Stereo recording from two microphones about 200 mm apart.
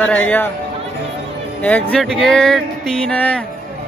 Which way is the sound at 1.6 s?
5° left (ahead or behind).